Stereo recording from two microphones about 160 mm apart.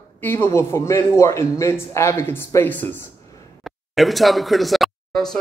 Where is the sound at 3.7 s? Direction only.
Centre (ahead or behind).